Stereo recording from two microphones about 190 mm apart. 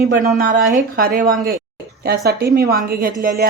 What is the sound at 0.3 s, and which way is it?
Speech, 45° right (ahead or behind).